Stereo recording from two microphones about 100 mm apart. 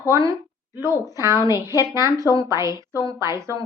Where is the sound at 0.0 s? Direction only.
35° right (ahead or behind).